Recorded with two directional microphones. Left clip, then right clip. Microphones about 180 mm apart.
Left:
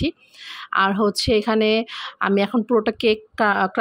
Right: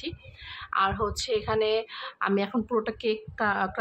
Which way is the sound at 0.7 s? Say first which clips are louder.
Left 7 dB; 40° left (ahead or behind).